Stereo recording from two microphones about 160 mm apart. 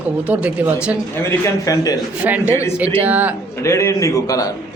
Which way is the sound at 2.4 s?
15° left (ahead or behind).